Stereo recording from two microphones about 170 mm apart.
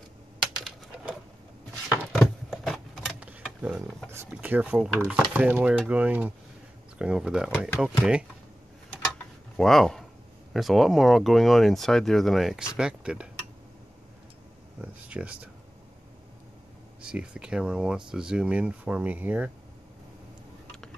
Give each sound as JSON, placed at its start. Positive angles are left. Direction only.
{"t": 2.1, "sound": "a sound", "side_deg": 0}
{"t": 4.1, "sound": "speech", "side_deg": -15}
{"t": 9.6, "sound": "speech", "side_deg": 0}
{"t": 14.8, "sound": "speech", "side_deg": -5}
{"t": 17.0, "sound": "speech", "side_deg": -5}